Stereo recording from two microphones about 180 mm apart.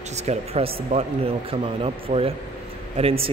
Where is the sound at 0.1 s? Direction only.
35° right (ahead or behind).